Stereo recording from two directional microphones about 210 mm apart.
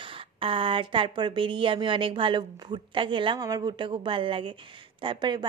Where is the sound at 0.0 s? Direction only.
25° right (ahead or behind).